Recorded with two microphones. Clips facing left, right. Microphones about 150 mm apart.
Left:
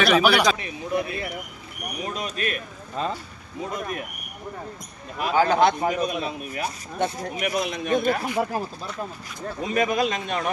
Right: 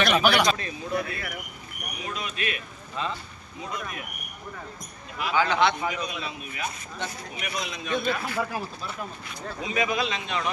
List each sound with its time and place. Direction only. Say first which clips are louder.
0.0 s a man's voice: left 3 dB; 5° left (ahead or behind); by 1.4 s 25° left (ahead or behind)
2.0 s speech: left 4 dB; 40° left (ahead or behind)
5.2 s speech: left 4 dB; 40° left (ahead or behind)
9.6 s speech: left 4 dB; 50° left (ahead or behind)